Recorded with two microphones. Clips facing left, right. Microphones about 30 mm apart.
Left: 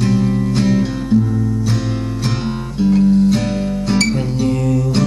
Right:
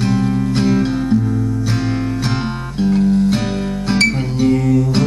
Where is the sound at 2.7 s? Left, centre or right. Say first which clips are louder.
Left 2 dB; centre.